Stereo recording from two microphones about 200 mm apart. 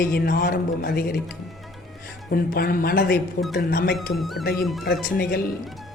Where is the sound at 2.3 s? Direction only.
50° left (ahead or behind).